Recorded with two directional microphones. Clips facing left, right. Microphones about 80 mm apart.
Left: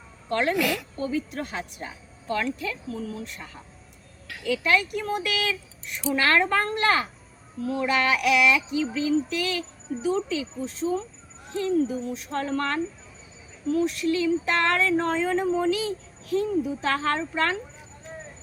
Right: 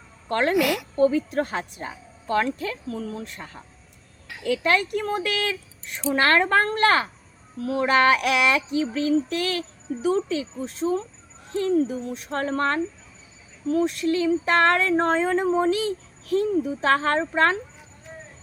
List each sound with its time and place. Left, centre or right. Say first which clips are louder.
0.3 s speech: right 2 dB; right
0.5 s speech: right 4 dB; centre
0.9 s speech: right 8 dB; right
2.9 s child singing: right 2 dB; right
4.3 s speech: right 1 dB; right
6.1 s child singing: right 3 dB; right
7.6 s speech: right 3 dB; right
7.9 s child singing: right 4 dB; right
11.5 s speech: right 2 dB; right